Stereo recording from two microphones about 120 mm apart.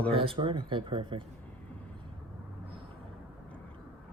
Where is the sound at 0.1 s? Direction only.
50° right (ahead or behind).